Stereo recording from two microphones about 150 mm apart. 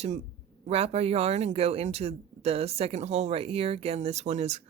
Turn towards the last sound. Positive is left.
turn(degrees=-50)  # may be behind; listen again after turning